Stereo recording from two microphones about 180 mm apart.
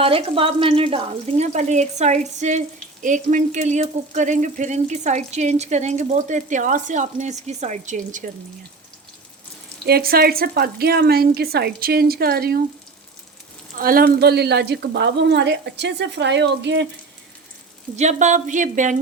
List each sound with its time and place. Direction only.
0.0 s speech: 30° right (ahead or behind)
9.8 s a woman's voice: 60° right (ahead or behind)
13.7 s a woman's voice: 50° right (ahead or behind); by 16.8 s 75° right (ahead or behind)
17.9 s speech: 40° right (ahead or behind)